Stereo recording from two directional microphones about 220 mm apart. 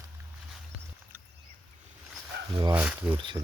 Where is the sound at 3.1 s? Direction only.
20° right (ahead or behind).